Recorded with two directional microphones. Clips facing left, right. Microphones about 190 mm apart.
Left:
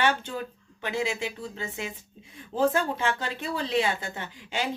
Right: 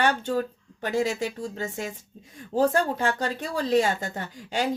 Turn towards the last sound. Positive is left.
turn(degrees=-40)  # may be behind; listen again after turning